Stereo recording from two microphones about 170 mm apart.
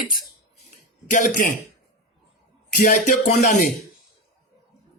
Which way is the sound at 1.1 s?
50° left (ahead or behind).